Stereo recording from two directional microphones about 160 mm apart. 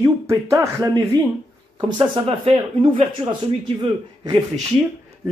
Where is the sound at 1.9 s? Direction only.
35° right (ahead or behind).